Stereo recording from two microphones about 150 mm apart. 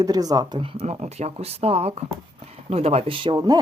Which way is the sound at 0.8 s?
50° right (ahead or behind).